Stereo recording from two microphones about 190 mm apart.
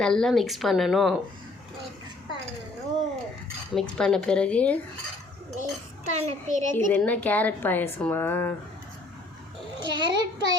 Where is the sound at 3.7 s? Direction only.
5° left (ahead or behind).